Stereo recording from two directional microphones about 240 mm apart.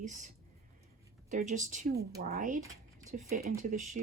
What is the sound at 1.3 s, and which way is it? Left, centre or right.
Speech, right.